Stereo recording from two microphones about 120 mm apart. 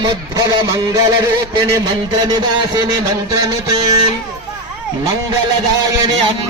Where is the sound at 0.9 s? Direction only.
25° right (ahead or behind).